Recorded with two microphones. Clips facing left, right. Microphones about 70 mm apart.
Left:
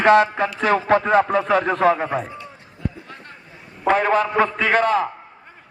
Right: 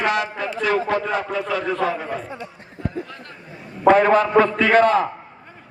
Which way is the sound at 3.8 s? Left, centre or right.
Centre.